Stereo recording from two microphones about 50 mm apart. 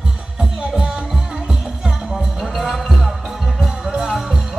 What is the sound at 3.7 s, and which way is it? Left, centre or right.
Music, centre.